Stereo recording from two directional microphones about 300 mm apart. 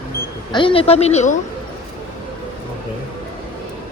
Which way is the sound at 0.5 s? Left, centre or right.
Centre.